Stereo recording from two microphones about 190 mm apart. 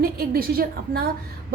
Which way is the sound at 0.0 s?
55° right (ahead or behind).